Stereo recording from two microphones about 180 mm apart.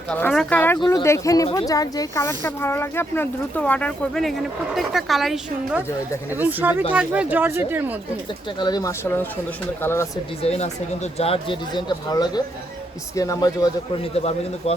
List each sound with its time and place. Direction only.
0.1 s speech: 5° left (ahead or behind); by 7.9 s 10° right (ahead or behind)
8.5 s speech: 25° left (ahead or behind)
10.4 s speech: 35° left (ahead or behind); by 13.7 s 20° left (ahead or behind)
14.1 s speech: 35° left (ahead or behind)